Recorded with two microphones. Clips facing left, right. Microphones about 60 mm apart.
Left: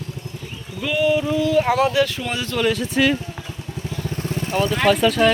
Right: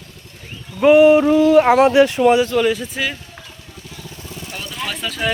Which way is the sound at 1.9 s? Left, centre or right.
Right.